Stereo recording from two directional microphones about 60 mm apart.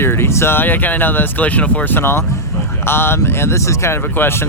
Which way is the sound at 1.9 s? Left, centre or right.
Left.